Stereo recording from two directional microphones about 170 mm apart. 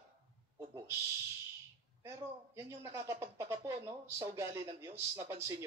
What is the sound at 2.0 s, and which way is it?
Speech, 15° right (ahead or behind).